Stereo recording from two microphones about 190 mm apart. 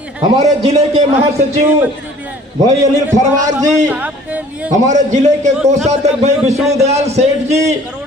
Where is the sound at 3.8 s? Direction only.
5° right (ahead or behind).